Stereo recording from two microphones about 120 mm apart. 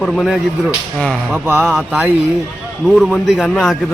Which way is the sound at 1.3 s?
20° right (ahead or behind).